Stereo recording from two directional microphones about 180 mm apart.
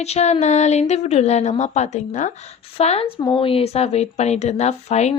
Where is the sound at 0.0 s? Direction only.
35° left (ahead or behind).